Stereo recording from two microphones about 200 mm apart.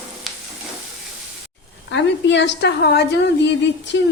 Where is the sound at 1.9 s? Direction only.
60° left (ahead or behind).